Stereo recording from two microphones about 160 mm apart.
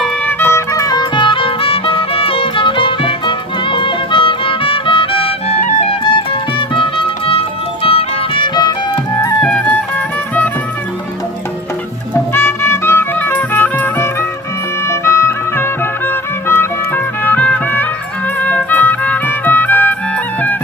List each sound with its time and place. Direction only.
0.0 s music: 10° left (ahead or behind); by 8.7 s 30° left (ahead or behind)
9.4 s music: 10° left (ahead or behind)
12.3 s music: 15° left (ahead or behind)